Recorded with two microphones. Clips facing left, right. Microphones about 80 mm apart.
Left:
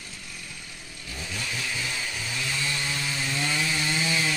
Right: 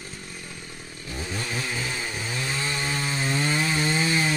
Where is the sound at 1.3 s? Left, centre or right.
Right.